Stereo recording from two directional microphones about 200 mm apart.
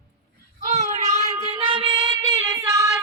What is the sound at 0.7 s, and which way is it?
Child singing, 35° right (ahead or behind).